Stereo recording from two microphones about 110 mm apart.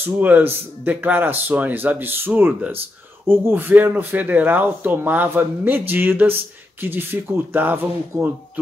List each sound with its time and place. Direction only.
0.0 s speech: 15° right (ahead or behind)